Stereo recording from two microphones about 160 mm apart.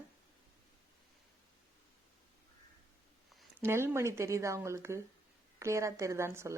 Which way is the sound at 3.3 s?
Centre (ahead or behind).